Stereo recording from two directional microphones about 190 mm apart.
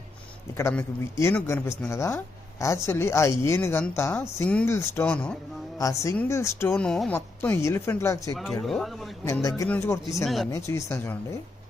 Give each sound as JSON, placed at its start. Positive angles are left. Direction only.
{"t": 0.5, "sound": "speech", "side_deg": 10}
{"t": 5.7, "sound": "speech", "side_deg": 15}
{"t": 6.7, "sound": "speech", "side_deg": 5}
{"t": 8.6, "sound": "speech", "side_deg": 0}
{"t": 9.2, "sound": "speech", "side_deg": 15}
{"t": 10.2, "sound": "speech", "side_deg": 0}
{"t": 10.7, "sound": "speech", "side_deg": 15}